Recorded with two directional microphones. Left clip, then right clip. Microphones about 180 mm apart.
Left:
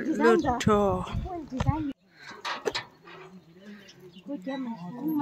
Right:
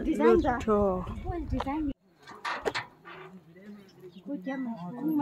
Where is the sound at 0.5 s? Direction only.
Centre (ahead or behind).